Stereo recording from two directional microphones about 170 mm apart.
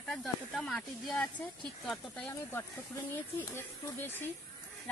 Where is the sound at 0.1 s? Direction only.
Centre (ahead or behind).